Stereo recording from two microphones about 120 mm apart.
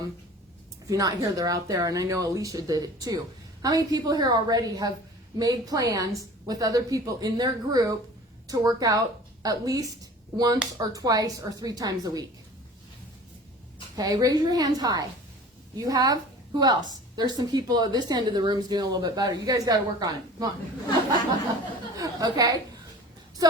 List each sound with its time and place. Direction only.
0.9 s a woman's voice: 30° right (ahead or behind)
13.9 s a woman's voice: 30° right (ahead or behind)
21.9 s speech: 30° right (ahead or behind)